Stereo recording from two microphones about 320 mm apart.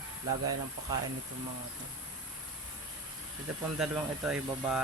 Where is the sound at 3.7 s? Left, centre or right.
Centre.